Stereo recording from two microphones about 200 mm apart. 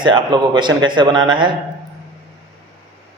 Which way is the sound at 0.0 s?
20° right (ahead or behind).